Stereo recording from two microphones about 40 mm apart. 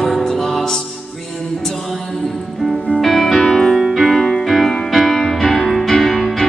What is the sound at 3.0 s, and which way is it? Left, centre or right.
Music, centre.